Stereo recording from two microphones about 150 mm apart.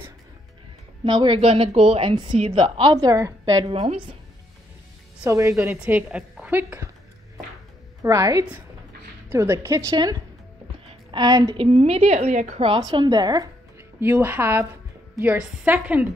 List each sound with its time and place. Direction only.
1.0 s a woman's voice: 30° right (ahead or behind)
3.6 s a woman's voice: 40° right (ahead or behind)
5.2 s a woman's voice: 20° right (ahead or behind)
8.0 s a woman's voice: 20° right (ahead or behind)
10.9 s a sound: 30° right (ahead or behind)
11.5 s a woman's voice: 40° right (ahead or behind)
12.6 s speech: 30° right (ahead or behind); by 16.1 s 10° right (ahead or behind)